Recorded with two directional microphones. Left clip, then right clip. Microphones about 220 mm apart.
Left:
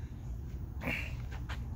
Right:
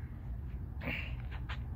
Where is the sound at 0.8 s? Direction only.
10° left (ahead or behind).